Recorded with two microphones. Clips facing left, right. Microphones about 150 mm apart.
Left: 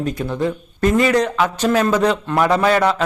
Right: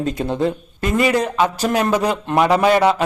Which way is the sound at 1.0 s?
10° right (ahead or behind).